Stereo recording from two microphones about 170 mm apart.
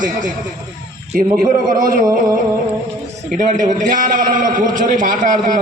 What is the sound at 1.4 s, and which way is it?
Speech, 55° right (ahead or behind).